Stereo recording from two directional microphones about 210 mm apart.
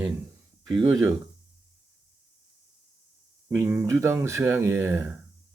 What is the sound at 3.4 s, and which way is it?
Speech, 10° right (ahead or behind).